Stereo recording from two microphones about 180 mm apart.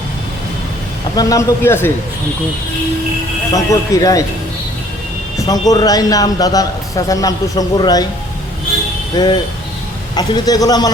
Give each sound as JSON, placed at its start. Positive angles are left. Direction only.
{"t": 1.1, "sound": "speech", "side_deg": 20}
{"t": 3.5, "sound": "a man's voice", "side_deg": 20}
{"t": 5.5, "sound": "a man's voice", "side_deg": 20}
{"t": 9.1, "sound": "a man's voice", "side_deg": 25}